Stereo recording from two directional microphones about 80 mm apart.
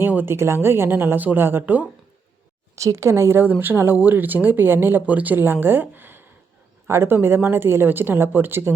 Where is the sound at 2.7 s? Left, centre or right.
Right.